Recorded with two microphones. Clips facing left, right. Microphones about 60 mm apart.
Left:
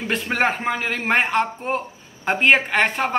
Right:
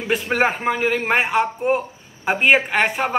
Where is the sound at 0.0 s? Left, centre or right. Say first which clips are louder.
Right 2 dB; centre.